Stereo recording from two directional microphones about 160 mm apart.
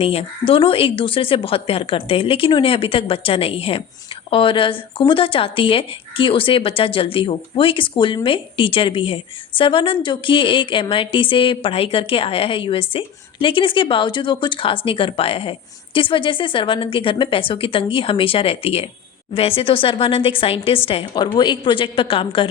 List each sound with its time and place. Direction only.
0.0 s speech: 35° left (ahead or behind)